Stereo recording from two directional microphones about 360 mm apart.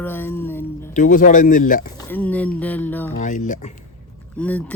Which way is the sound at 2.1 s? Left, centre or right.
Centre.